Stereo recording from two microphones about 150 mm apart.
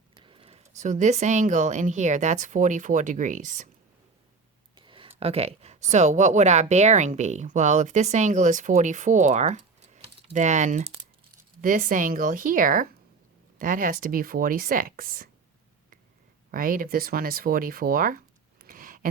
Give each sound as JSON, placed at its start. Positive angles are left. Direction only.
{"t": 0.1, "sound": "speech", "side_deg": -35}
{"t": 4.8, "sound": "speech", "side_deg": -35}
{"t": 11.6, "sound": "speech", "side_deg": -60}
{"t": 16.5, "sound": "speech", "side_deg": -70}
{"t": 18.6, "sound": "a sound", "side_deg": -70}